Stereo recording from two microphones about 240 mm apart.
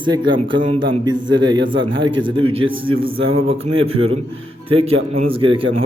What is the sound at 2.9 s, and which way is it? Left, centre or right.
Speech, right.